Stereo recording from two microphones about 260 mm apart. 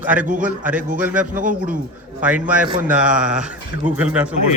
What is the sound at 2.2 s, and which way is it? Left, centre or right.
A man's voice, centre.